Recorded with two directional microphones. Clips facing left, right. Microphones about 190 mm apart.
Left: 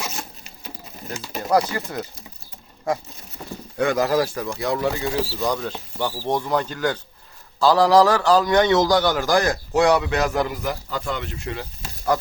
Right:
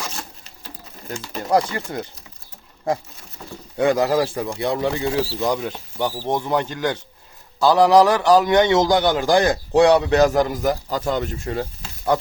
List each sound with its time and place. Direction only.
1.5 s speech: 25° right (ahead or behind)
3.8 s a man's voice: 30° right (ahead or behind)